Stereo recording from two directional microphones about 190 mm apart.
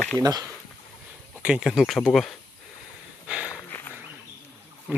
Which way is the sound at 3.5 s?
10° left (ahead or behind).